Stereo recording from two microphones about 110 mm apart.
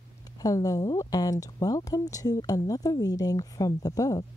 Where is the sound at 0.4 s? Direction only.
30° left (ahead or behind).